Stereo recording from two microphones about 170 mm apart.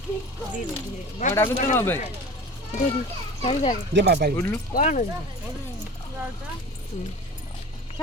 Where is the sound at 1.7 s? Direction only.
10° left (ahead or behind).